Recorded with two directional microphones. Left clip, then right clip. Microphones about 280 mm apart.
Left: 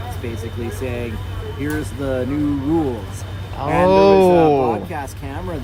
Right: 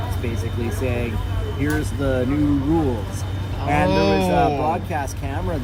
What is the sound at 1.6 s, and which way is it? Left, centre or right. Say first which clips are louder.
Speech: even; centre.